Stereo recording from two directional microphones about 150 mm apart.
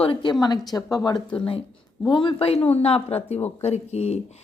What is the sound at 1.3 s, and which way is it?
A woman's voice, 35° left (ahead or behind).